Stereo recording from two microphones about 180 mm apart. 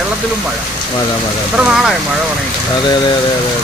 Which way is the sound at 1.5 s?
5° right (ahead or behind).